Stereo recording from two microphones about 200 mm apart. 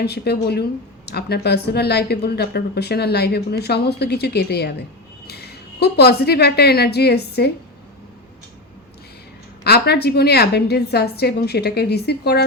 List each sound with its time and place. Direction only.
0.0 s a woman's voice: 55° left (ahead or behind)
9.6 s speech: 55° left (ahead or behind)